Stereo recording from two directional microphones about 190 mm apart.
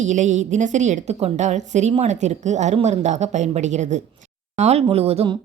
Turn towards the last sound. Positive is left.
turn(degrees=-30)  # may be behind; listen again after turning